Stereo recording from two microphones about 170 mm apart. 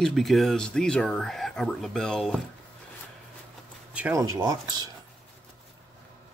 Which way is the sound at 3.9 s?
10° right (ahead or behind).